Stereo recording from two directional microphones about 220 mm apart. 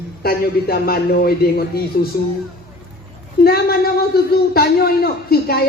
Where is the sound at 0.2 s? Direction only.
45° left (ahead or behind).